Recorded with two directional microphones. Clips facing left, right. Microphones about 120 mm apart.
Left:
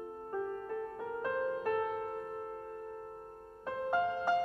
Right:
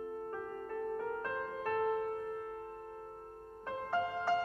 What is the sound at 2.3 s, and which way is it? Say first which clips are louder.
Music: even; 25° left (ahead or behind).